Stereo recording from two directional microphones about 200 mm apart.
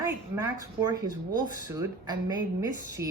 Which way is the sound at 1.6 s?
20° right (ahead or behind).